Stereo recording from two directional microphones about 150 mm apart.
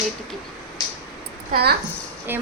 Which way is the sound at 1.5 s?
90° right.